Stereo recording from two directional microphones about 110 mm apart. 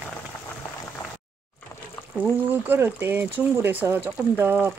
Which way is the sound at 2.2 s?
20° right (ahead or behind).